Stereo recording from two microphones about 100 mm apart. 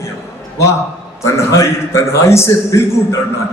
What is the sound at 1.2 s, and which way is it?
A man's voice, 30° left (ahead or behind).